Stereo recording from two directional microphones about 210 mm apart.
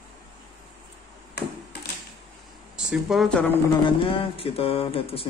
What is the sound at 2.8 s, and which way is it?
Speech, centre (ahead or behind).